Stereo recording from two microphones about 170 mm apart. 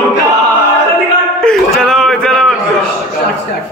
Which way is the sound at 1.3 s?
5° left (ahead or behind).